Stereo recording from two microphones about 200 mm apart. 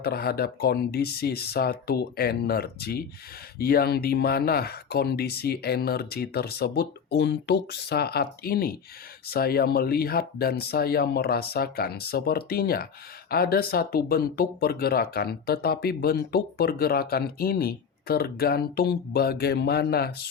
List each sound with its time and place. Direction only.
0.0 s speech: 50° left (ahead or behind)